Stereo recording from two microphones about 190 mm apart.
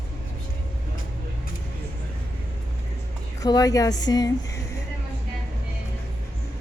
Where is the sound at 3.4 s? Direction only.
20° left (ahead or behind).